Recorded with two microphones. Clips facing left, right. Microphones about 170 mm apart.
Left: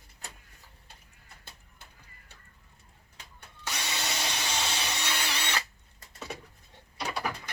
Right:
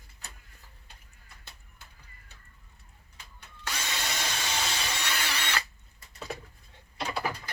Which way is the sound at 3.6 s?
15° left (ahead or behind).